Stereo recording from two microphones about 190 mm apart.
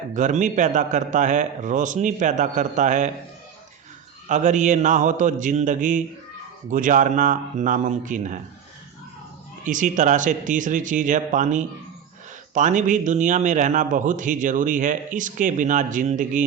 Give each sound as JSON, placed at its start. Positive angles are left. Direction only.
{"t": 0.1, "sound": "a man's voice", "side_deg": -40}
{"t": 4.3, "sound": "a man's voice", "side_deg": -40}
{"t": 9.6, "sound": "a man's voice", "side_deg": -40}